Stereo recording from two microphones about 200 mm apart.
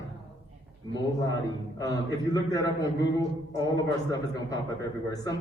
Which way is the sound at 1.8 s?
20° left (ahead or behind).